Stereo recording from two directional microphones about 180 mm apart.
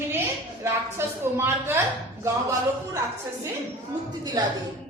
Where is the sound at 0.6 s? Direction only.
15° right (ahead or behind).